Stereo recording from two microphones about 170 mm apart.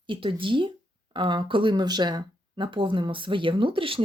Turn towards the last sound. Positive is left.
turn(degrees=-30)  # may be behind; listen again after turning